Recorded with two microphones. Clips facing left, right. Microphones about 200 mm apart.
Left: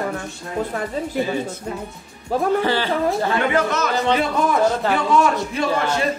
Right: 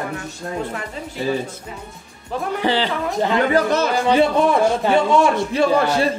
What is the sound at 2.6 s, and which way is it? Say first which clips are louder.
Speech: left 1 dB; 15° right (ahead or behind).